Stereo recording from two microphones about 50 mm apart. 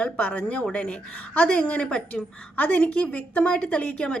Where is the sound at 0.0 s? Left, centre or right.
Left.